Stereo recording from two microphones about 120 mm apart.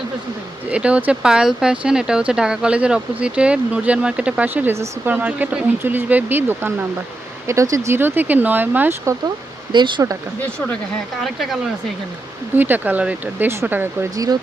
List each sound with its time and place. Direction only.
0.7 s speech: 10° right (ahead or behind)
9.7 s speech: 40° right (ahead or behind)
11.2 s speech: centre (ahead or behind)
12.5 s speech: 15° right (ahead or behind)